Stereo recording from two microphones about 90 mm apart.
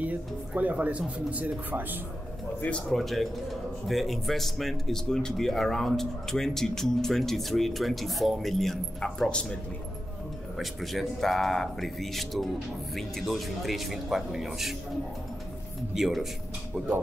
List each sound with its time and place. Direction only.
0.0 s speech: 15° right (ahead or behind)
2.9 s speech: centre (ahead or behind)
10.6 s speech: centre (ahead or behind)
15.9 s speech: 5° right (ahead or behind)